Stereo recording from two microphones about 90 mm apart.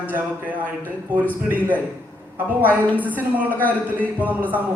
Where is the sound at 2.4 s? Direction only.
20° right (ahead or behind).